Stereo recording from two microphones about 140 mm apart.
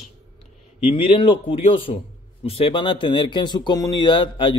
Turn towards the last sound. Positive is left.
turn(degrees=35)  # may be behind; listen again after turning